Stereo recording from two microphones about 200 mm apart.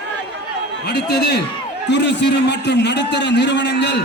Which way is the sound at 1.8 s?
60° left (ahead or behind).